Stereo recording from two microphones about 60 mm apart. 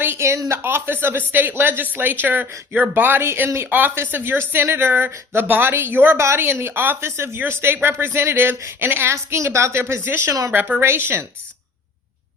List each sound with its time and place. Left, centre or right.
0.0 s a sound: right
0.3 s speech: right
0.6 s speech: right
3.9 s speech: right
6.1 s a woman's voice: right
9.1 s a woman's voice: right
10.5 s speech: right